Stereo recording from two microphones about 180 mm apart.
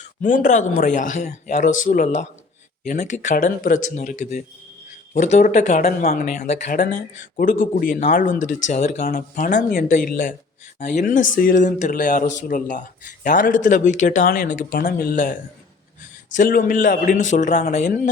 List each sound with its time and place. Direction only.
0.0 s speech: 50° left (ahead or behind)